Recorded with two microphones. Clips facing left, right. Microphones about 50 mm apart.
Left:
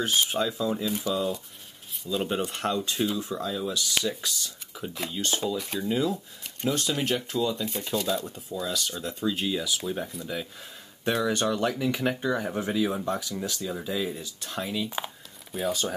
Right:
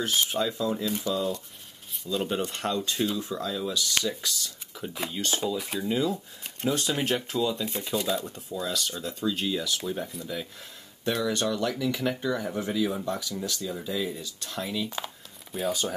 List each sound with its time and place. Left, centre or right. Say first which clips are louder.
0.0 s speech: left 1 dB; centre
4.9 s speech: right 1 dB; centre
5.2 s speech: even; centre
6.6 s speech: even; centre
11.1 s speech: left 2 dB; left
15.5 s speech: even; centre